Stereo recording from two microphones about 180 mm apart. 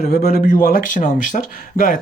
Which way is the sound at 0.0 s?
60° left (ahead or behind).